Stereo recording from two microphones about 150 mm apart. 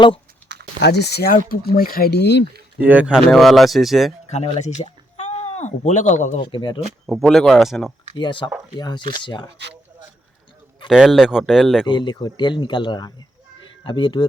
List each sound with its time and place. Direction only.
0.4 s a sound: 10° left (ahead or behind)
0.9 s speech: 90° left
2.7 s speech: 10° right (ahead or behind)
4.3 s speech: 50° left (ahead or behind)
6.4 s speech: 30° left (ahead or behind)
7.1 s speech: centre (ahead or behind)
8.1 s speech: 35° left (ahead or behind)
10.8 s speech: centre (ahead or behind)
11.9 s speech: 30° left (ahead or behind)
13.6 s a sound: 30° left (ahead or behind)